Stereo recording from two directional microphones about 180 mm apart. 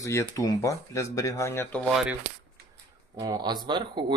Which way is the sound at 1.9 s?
Centre (ahead or behind).